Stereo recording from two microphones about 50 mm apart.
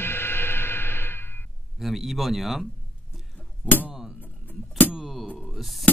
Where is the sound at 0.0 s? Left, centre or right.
Left.